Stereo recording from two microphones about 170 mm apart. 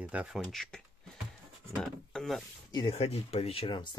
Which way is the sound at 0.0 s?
10° right (ahead or behind).